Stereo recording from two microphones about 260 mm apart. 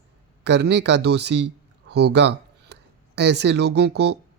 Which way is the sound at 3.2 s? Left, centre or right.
Right.